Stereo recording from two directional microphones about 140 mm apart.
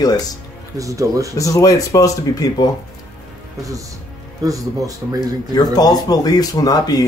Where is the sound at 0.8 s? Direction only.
25° right (ahead or behind).